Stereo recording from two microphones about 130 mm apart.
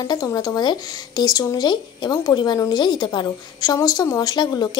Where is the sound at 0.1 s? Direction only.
30° left (ahead or behind).